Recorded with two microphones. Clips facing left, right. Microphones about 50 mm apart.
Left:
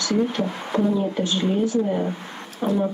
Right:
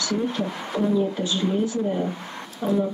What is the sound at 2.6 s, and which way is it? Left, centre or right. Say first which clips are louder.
Speech: left 1 dB; left.